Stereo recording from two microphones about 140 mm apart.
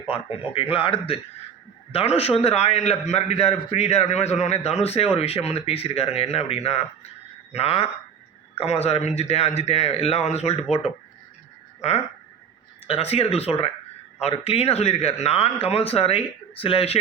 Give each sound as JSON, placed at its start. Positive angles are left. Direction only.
{"t": 0.1, "sound": "a man's voice", "side_deg": 40}
{"t": 11.8, "sound": "a man's voice", "side_deg": 50}